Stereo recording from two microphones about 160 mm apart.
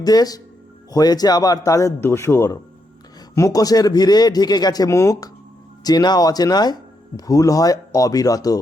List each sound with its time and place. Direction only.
0.0 s speech: 25° left (ahead or behind)